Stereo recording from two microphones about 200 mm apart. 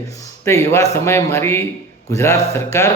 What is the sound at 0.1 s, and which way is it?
A man's voice, 15° left (ahead or behind).